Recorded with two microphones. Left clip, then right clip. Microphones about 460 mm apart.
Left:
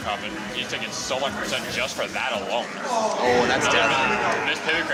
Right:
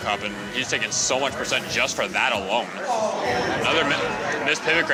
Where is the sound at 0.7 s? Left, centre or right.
Right.